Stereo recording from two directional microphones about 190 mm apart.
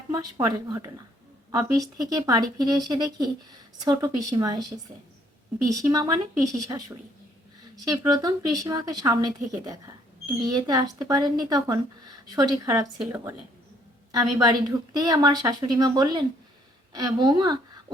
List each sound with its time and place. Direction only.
0.1 s a woman's voice: 20° right (ahead or behind)
5.6 s a woman's voice: 20° right (ahead or behind)